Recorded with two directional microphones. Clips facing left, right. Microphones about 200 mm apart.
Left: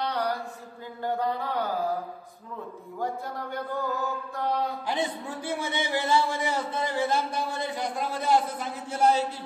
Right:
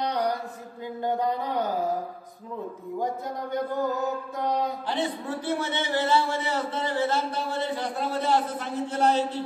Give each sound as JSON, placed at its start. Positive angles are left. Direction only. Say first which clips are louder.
{"t": 0.0, "sound": "a sound", "louder": "right 2 dB", "side_deg": -20}
{"t": 1.0, "sound": "mantra", "louder": "right 2 dB", "side_deg": -20}
{"t": 3.5, "sound": "mantra", "louder": "right 4 dB", "side_deg": -20}
{"t": 4.8, "sound": "a man's voice", "louder": "right 1 dB", "side_deg": 10}